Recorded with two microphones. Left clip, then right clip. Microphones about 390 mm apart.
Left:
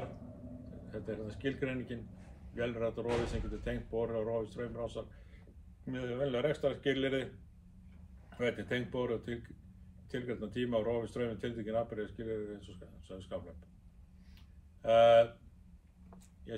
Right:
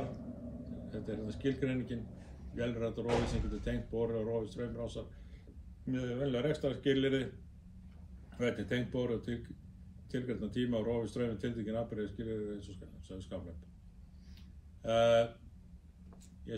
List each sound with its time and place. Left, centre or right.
0.8 s a man's voice: centre
8.4 s speech: centre
14.8 s speech: centre